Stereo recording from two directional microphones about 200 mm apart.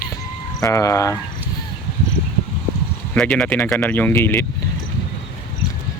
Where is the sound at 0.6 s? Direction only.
15° left (ahead or behind).